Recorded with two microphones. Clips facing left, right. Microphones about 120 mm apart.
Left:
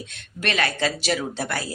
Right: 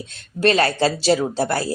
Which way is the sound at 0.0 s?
30° right (ahead or behind).